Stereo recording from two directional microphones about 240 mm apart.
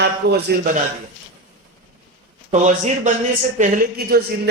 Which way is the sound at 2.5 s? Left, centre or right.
Right.